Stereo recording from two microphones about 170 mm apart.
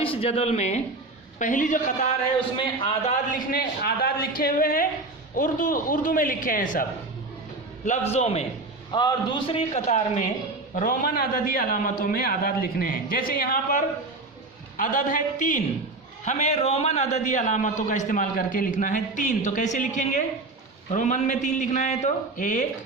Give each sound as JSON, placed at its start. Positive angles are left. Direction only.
{"t": 0.0, "sound": "a man's voice", "side_deg": 35}
{"t": 3.1, "sound": "a man's voice", "side_deg": 50}
{"t": 7.9, "sound": "a man's voice", "side_deg": 40}
{"t": 8.9, "sound": "a man's voice", "side_deg": 25}